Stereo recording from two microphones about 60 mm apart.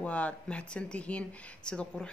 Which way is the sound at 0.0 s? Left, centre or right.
Left.